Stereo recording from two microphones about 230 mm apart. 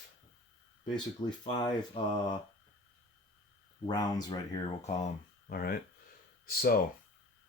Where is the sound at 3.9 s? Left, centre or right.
Centre.